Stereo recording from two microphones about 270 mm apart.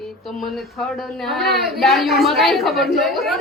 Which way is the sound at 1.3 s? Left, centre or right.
Centre.